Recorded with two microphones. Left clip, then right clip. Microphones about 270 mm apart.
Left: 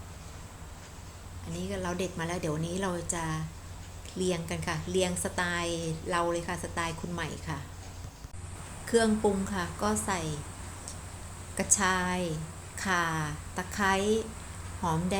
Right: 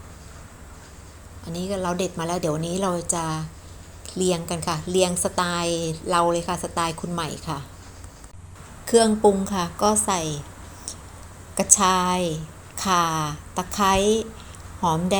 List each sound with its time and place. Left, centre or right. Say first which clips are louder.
1.5 s a woman's voice: right 8 dB; centre
8.8 s a woman's voice: right 9 dB; centre
11.5 s a woman's voice: right 9 dB; centre